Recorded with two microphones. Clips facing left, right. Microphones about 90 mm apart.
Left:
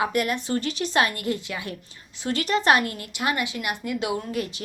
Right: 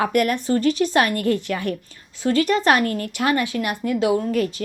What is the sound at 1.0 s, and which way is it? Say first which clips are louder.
Speech: right 4 dB; 20° left (ahead or behind).